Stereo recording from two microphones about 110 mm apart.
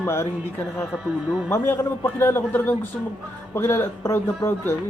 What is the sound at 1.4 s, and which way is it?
Speech, 20° left (ahead or behind).